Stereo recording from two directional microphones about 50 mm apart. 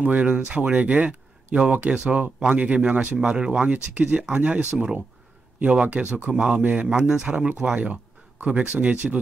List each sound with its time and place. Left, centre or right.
0.0 s speech: right
6.9 s speech: centre